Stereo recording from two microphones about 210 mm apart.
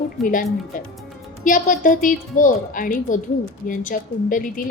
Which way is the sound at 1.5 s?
40° left (ahead or behind).